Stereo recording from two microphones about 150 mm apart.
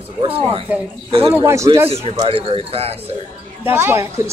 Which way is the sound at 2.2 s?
40° right (ahead or behind).